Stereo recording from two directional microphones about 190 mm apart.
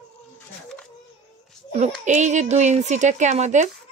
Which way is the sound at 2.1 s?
40° right (ahead or behind).